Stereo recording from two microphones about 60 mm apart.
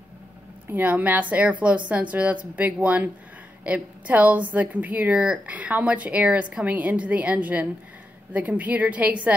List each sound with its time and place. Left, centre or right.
0.7 s a woman's voice: right
5.1 s a woman's voice: centre